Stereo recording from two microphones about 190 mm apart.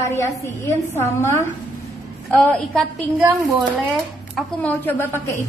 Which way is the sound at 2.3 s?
5° left (ahead or behind).